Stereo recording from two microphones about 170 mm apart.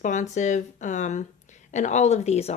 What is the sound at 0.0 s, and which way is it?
Speech, 45° left (ahead or behind).